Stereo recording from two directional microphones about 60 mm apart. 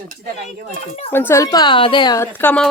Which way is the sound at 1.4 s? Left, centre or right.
Left.